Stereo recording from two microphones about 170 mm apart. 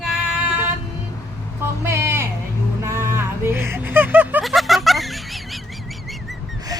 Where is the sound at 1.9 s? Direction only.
15° right (ahead or behind); by 5.2 s centre (ahead or behind).